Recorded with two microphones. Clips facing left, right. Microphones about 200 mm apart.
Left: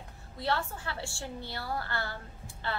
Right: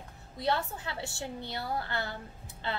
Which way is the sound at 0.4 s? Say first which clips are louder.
Right 1 dB; 20° right (ahead or behind).